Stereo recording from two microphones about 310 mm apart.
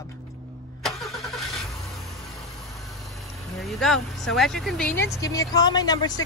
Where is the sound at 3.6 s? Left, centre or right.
Centre.